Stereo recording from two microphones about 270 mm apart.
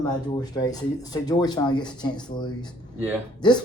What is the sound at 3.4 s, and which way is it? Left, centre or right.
Speech, centre.